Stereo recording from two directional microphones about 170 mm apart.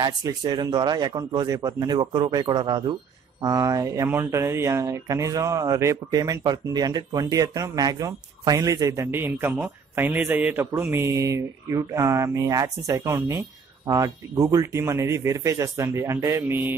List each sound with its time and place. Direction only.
0.0 s speech: 25° right (ahead or behind)